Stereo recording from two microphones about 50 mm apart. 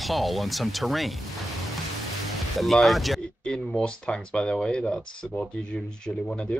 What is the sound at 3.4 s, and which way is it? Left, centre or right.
Speech, left.